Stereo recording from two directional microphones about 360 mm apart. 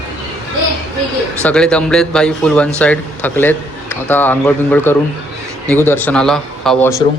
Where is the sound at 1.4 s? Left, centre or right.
Centre.